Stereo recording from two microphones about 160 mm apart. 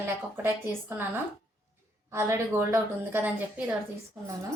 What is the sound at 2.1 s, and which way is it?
A woman's voice, 15° right (ahead or behind).